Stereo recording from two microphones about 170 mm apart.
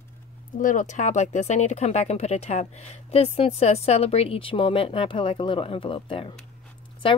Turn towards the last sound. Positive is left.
turn(degrees=30)  # may be behind; listen again after turning